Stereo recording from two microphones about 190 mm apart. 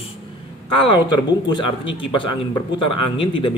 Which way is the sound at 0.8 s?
25° left (ahead or behind).